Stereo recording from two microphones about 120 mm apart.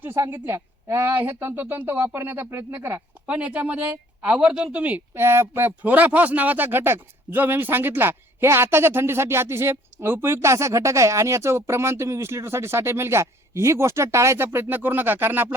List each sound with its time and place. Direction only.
0.0 s speech: 20° right (ahead or behind)